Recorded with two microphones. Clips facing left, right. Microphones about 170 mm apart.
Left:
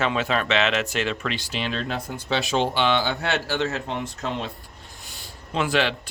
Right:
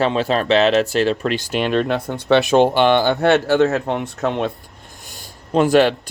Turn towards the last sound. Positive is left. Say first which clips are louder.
# right 10 dB
turn(degrees=-45)  # may be behind; listen again after turning